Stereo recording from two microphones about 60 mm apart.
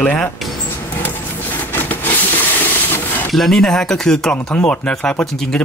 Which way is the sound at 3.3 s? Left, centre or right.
Centre.